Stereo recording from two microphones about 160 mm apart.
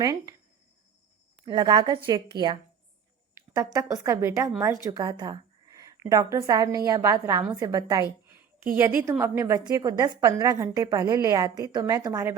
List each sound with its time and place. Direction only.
0.0 s a woman's voice: 20° right (ahead or behind)
1.5 s a woman's voice: 30° right (ahead or behind)
3.6 s a woman's voice: 20° right (ahead or behind)